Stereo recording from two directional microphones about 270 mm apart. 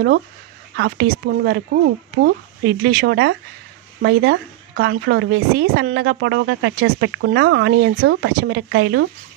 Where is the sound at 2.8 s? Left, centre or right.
Right.